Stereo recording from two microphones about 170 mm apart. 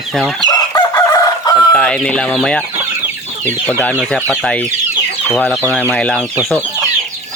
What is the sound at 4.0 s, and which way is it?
Speech, 5° left (ahead or behind).